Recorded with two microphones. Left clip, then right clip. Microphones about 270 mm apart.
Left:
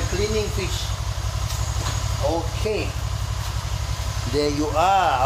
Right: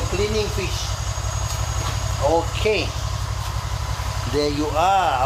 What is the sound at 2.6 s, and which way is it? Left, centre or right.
Speech, right.